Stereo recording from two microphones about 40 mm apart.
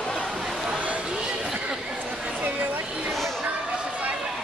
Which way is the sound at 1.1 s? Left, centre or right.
Right.